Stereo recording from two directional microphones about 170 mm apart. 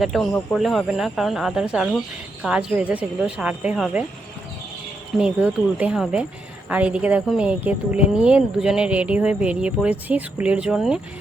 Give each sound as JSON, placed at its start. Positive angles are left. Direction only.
{"t": 0.0, "sound": "speech", "side_deg": 0}
{"t": 5.2, "sound": "speech", "side_deg": -5}